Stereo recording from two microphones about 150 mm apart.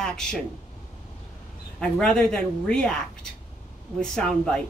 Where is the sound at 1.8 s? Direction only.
5° left (ahead or behind).